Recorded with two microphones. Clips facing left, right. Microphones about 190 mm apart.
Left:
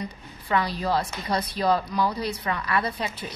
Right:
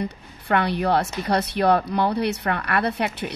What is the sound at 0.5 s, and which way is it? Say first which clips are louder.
A woman's voice: right 4 dB; 65° right (ahead or behind).